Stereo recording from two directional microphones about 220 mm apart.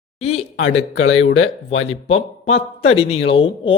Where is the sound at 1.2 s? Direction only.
65° left (ahead or behind).